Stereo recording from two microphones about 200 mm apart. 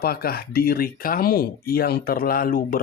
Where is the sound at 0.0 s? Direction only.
50° left (ahead or behind).